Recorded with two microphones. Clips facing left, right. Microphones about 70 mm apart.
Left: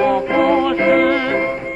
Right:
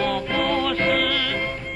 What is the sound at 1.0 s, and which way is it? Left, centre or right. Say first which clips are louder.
Music: left 9 dB; left.